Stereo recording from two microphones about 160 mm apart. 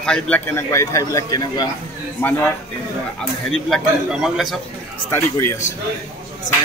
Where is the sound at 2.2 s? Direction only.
15° left (ahead or behind).